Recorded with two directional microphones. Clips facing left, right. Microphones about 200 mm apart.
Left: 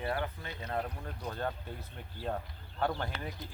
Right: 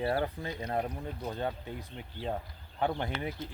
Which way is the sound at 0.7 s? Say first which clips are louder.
Right 2 dB; 20° right (ahead or behind).